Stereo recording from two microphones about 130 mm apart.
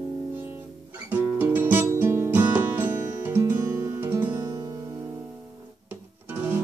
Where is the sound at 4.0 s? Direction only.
15° right (ahead or behind).